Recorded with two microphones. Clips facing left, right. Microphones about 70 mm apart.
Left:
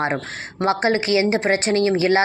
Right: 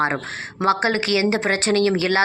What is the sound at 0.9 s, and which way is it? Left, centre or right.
A woman's voice, left.